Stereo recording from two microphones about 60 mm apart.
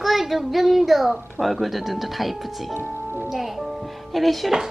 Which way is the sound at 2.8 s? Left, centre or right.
Right.